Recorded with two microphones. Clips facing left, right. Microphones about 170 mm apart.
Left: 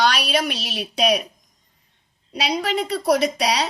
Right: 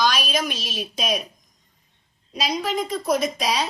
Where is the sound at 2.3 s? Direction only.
70° left (ahead or behind).